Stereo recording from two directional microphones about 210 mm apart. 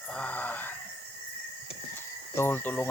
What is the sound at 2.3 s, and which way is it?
Speech, 10° left (ahead or behind).